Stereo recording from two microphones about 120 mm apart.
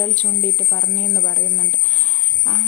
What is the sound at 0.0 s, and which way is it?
Speech, 15° left (ahead or behind).